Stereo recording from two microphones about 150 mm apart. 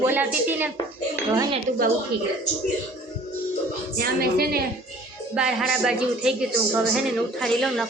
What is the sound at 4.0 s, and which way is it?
Speech, 90° right.